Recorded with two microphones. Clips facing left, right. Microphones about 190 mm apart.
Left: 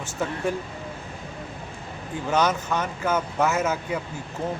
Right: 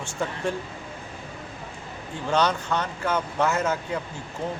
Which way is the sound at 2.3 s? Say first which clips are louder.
Even; 10° left (ahead or behind).